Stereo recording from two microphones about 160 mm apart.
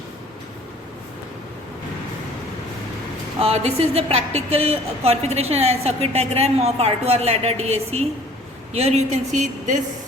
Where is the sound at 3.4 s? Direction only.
40° right (ahead or behind).